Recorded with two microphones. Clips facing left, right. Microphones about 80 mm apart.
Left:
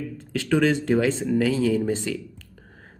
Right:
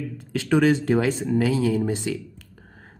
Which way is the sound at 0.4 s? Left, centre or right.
Centre.